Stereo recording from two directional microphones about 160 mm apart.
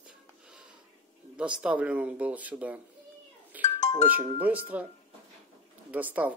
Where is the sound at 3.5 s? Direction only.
10° right (ahead or behind).